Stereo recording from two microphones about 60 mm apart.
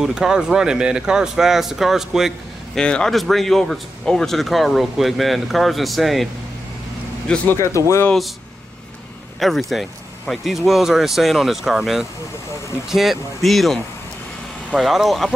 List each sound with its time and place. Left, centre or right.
0.0 s speech: centre
2.7 s speech: centre
7.5 s speech: left
9.4 s speech: centre
14.8 s speech: centre